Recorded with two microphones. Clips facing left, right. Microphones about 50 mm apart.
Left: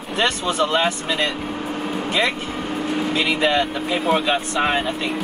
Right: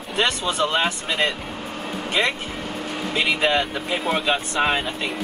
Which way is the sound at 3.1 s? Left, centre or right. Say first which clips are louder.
Even; centre.